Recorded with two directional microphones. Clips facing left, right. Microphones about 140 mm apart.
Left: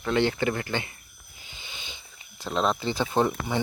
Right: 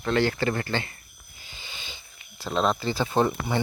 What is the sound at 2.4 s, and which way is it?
Speech, 10° right (ahead or behind).